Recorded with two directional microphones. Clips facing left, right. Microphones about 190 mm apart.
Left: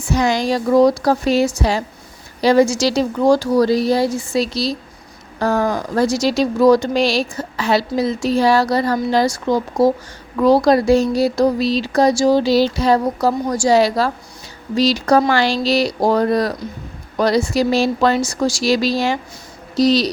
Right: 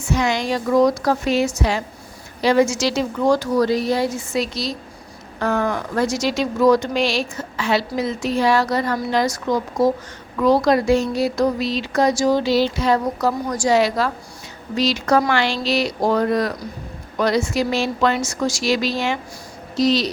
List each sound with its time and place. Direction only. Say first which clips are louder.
0.0 s speech: left 3 dB; 35° left (ahead or behind)